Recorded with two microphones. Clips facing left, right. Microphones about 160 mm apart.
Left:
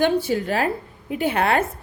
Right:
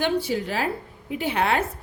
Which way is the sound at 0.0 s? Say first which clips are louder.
Left 4 dB; 50° left (ahead or behind).